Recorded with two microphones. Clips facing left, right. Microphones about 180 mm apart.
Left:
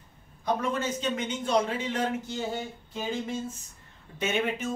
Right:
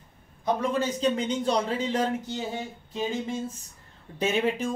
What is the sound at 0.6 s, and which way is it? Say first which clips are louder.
Speech: right 3 dB; 35° right (ahead or behind).